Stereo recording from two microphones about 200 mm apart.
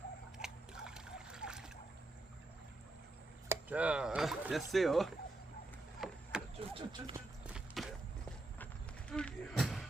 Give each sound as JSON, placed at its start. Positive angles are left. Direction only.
{"t": 0.3, "sound": "trickle", "side_deg": -5}
{"t": 3.5, "sound": "speech", "side_deg": -5}
{"t": 6.0, "sound": "chop", "side_deg": 0}
{"t": 6.6, "sound": "speech", "side_deg": -25}
{"t": 7.4, "sound": "a sound", "side_deg": 0}